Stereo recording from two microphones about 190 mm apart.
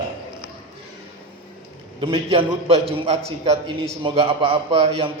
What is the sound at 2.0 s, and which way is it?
A man's voice, 25° right (ahead or behind).